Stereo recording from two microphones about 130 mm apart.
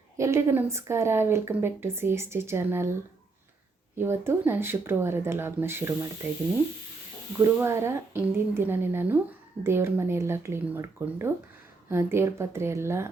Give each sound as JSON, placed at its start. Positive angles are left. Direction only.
{"t": 0.2, "sound": "speech", "side_deg": -20}
{"t": 3.9, "sound": "speech", "side_deg": -20}
{"t": 7.3, "sound": "speech", "side_deg": -20}